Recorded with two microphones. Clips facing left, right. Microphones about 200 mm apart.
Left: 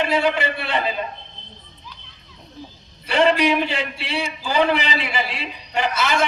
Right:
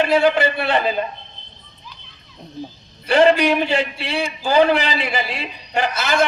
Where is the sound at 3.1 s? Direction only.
40° right (ahead or behind).